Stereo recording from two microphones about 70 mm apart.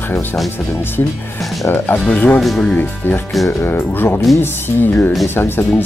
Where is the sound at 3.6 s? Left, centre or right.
Left.